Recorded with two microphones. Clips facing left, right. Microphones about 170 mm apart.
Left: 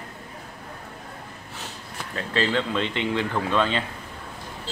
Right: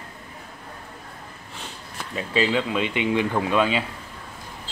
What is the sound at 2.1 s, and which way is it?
Speech, 10° right (ahead or behind).